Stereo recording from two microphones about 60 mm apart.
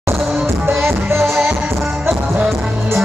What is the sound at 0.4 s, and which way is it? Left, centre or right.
Music, right.